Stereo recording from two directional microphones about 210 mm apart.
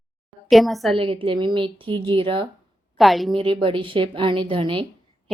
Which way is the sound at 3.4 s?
25° right (ahead or behind).